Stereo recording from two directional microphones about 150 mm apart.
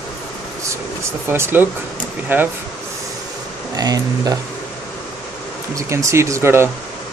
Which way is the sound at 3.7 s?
25° right (ahead or behind).